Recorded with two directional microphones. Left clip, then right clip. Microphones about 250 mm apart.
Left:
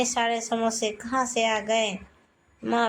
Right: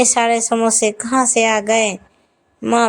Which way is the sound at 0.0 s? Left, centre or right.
Right.